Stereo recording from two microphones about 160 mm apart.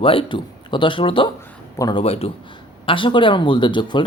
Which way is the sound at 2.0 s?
40° left (ahead or behind).